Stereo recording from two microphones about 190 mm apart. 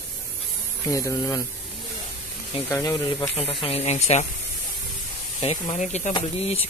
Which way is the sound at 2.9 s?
25° left (ahead or behind).